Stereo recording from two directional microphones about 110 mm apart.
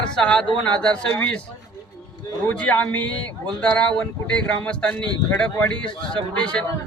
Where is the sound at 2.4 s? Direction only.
10° left (ahead or behind).